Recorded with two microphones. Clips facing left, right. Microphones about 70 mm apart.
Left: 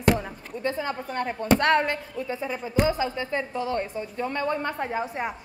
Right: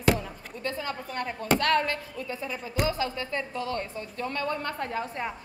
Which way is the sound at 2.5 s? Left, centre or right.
Left.